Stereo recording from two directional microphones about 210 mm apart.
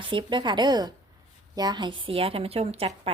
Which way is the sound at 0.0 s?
25° right (ahead or behind).